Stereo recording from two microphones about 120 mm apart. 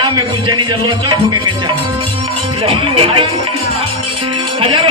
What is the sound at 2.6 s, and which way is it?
Speech, 50° right (ahead or behind).